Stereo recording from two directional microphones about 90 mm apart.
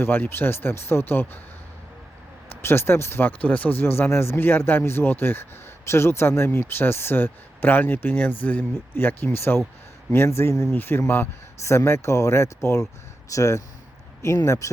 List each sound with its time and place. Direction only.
0.0 s speech: 25° left (ahead or behind)
2.6 s speech: 25° left (ahead or behind)